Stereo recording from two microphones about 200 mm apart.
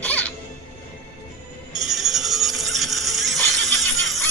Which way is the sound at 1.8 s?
Centre (ahead or behind).